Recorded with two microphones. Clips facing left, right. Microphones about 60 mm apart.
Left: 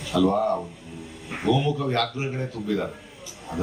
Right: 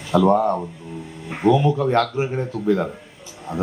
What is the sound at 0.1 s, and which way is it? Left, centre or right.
Speech, right.